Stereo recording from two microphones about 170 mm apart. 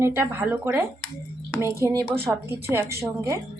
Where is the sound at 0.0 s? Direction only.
15° right (ahead or behind).